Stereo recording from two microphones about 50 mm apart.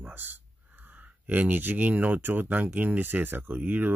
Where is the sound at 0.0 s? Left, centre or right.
Right.